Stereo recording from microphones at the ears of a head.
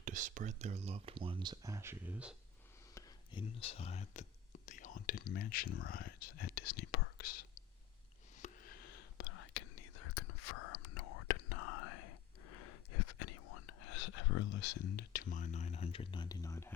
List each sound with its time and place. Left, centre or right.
0.0 s speech: right
2.9 s speech: left
8.4 s whispering: left